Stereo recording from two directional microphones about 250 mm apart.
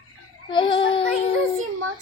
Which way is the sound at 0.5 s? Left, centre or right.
Centre.